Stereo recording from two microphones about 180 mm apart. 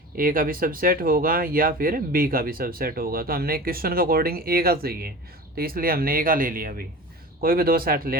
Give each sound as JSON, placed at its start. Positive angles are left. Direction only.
{"t": 0.2, "sound": "speech", "side_deg": -50}